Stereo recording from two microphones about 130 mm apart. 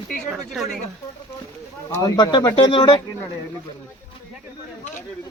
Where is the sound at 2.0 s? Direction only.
30° left (ahead or behind).